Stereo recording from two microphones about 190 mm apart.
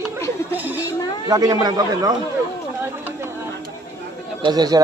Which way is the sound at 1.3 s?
20° right (ahead or behind).